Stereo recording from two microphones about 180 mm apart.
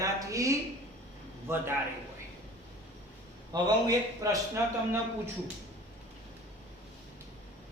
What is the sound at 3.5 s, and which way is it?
A man's voice, 20° right (ahead or behind).